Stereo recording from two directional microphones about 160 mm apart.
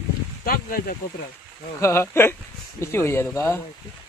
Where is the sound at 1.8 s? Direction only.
15° left (ahead or behind).